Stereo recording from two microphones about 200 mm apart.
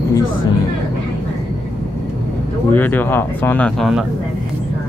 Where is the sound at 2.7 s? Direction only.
10° left (ahead or behind).